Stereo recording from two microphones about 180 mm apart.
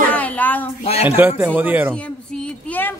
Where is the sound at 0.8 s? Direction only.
35° left (ahead or behind).